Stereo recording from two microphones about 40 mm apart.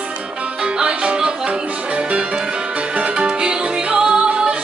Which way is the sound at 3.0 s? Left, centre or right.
Right.